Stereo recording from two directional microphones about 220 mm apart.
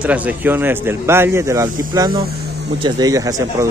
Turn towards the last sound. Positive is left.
turn(degrees=-15)  # may be behind; listen again after turning